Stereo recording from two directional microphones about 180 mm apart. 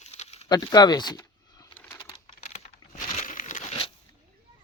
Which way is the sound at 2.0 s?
30° left (ahead or behind).